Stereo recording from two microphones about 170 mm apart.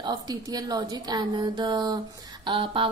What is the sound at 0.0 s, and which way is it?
A woman's voice, 25° right (ahead or behind).